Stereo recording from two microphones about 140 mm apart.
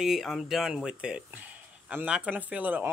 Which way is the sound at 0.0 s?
Centre (ahead or behind).